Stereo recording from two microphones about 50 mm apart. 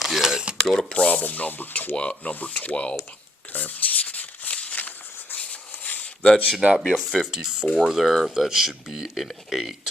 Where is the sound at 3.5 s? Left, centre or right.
Left.